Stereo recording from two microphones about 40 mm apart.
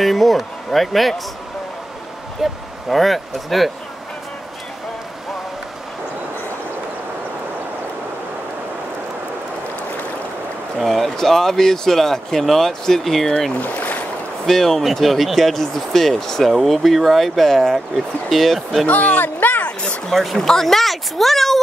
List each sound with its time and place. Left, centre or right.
0.0 s speech: centre
2.4 s speech: centre
10.9 s speech: centre
13.6 s boat: left
14.4 s speech: centre
18.9 s speech: left
19.6 s a sound: left
20.1 s speech: centre